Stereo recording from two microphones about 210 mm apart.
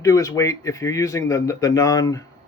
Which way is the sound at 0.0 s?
15° left (ahead or behind).